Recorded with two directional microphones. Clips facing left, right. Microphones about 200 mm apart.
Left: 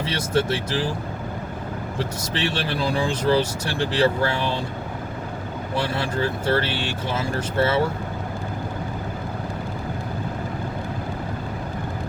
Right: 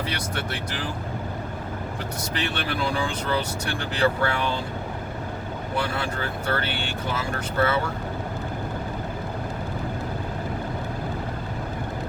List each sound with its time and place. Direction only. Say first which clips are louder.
0.0 s speech: left 7 dB; 25° left (ahead or behind)
2.3 s speech: left 2 dB; 30° left (ahead or behind)
5.7 s speech: left 3 dB; 25° left (ahead or behind)